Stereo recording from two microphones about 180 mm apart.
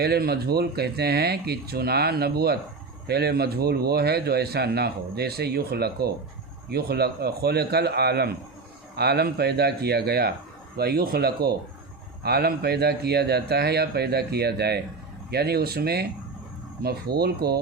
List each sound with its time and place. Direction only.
0.0 s speech: 60° right (ahead or behind)